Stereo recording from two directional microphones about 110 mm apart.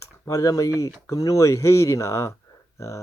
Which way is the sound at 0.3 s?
30° left (ahead or behind).